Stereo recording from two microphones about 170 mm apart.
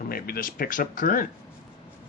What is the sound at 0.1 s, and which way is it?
Speech, 60° left (ahead or behind).